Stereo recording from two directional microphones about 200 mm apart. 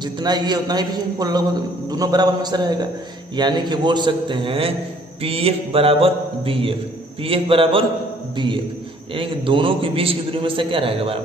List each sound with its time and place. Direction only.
0.0 s a man's voice: 20° right (ahead or behind)
9.1 s a man's voice: 25° right (ahead or behind)